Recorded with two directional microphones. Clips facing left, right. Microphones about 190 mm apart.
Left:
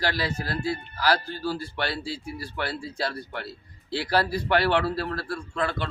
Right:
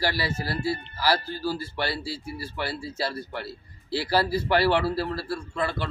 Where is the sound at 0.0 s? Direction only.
10° right (ahead or behind).